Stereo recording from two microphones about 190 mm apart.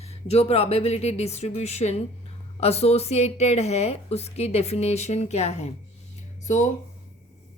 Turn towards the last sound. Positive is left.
turn(degrees=40)  # may be behind; listen again after turning